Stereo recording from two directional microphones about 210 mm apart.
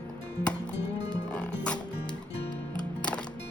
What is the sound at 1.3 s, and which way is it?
Music, 5° left (ahead or behind).